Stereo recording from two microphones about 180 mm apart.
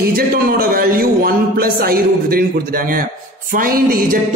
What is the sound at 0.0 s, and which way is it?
A man's voice, 55° right (ahead or behind).